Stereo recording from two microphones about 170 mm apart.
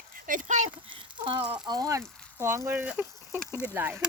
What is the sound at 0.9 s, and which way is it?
Speech, 30° right (ahead or behind).